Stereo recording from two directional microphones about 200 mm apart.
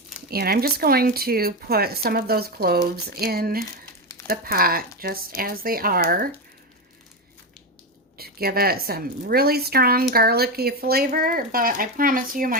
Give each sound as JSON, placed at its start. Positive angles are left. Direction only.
{"t": 0.3, "sound": "a woman's voice", "side_deg": -50}
{"t": 8.2, "sound": "a woman's voice", "side_deg": -50}